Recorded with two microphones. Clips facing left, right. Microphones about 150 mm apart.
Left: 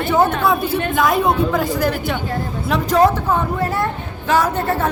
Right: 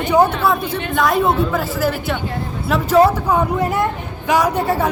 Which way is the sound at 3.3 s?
15° right (ahead or behind).